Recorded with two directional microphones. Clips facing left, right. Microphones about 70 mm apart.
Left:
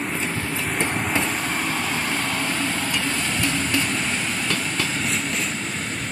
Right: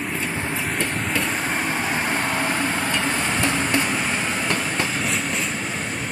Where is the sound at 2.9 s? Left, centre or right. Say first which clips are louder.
Right 2 dB; right.